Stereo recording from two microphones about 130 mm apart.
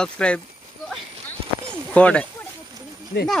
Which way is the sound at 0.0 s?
10° left (ahead or behind).